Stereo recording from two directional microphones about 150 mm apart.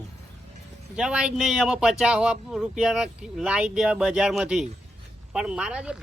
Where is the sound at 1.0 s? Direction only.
5° right (ahead or behind).